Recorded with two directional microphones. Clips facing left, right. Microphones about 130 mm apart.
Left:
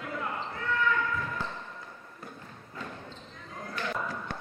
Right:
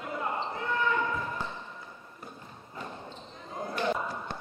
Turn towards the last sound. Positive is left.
turn(degrees=-25)  # may be behind; listen again after turning